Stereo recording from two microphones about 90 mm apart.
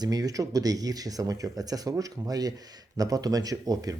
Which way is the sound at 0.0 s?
45° right (ahead or behind).